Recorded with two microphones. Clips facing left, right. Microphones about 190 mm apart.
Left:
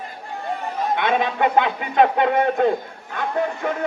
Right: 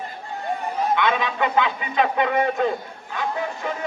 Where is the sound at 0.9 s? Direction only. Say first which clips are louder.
Left 5 dB; 50° left (ahead or behind).